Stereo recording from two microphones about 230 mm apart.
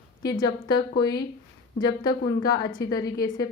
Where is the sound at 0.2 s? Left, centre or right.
Centre.